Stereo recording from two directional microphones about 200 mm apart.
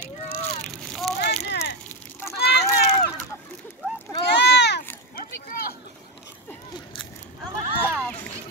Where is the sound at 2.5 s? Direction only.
55° left (ahead or behind).